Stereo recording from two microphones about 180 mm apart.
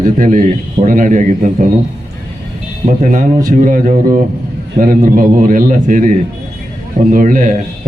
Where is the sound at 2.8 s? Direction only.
45° right (ahead or behind).